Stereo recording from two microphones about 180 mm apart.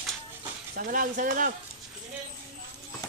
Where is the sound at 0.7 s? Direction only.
50° right (ahead or behind).